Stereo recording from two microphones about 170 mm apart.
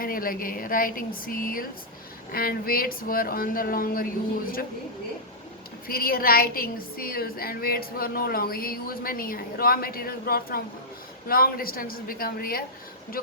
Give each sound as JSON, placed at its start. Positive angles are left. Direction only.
{"t": 0.0, "sound": "a woman's voice", "side_deg": 55}
{"t": 5.9, "sound": "a woman's voice", "side_deg": 60}